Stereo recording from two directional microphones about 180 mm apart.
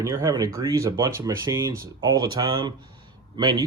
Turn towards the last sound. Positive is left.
turn(degrees=-20)  # may be behind; listen again after turning